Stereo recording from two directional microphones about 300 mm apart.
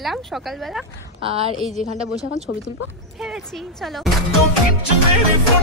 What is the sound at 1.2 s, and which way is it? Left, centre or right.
Speech, centre.